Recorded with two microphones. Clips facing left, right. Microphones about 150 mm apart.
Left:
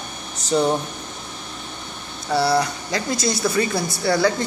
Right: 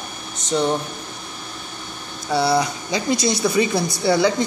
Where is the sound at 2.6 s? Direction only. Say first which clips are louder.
Right 1 dB; 20° right (ahead or behind).